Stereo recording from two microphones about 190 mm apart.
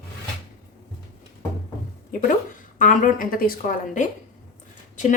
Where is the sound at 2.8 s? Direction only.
40° left (ahead or behind).